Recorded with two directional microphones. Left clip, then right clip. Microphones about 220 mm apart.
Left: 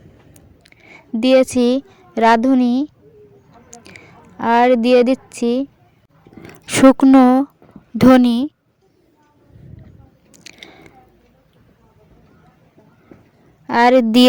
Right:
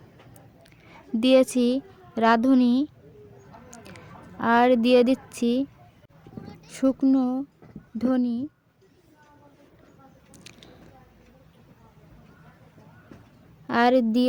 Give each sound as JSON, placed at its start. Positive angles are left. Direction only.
{"t": 0.3, "sound": "a sound", "side_deg": 20}
{"t": 1.2, "sound": "a woman's voice", "side_deg": 20}
{"t": 3.7, "sound": "a sound", "side_deg": 20}
{"t": 6.5, "sound": "a woman's voice", "side_deg": 40}
{"t": 10.3, "sound": "biting", "side_deg": 20}
{"t": 13.7, "sound": "a woman's voice", "side_deg": 25}